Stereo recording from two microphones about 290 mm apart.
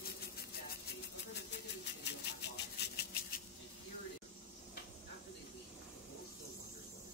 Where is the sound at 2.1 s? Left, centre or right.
Left.